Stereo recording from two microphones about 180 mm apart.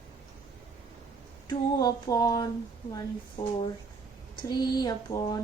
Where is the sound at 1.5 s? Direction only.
20° left (ahead or behind).